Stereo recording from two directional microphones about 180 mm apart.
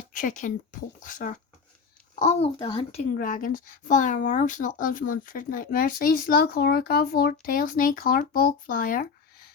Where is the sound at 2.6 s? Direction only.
30° left (ahead or behind).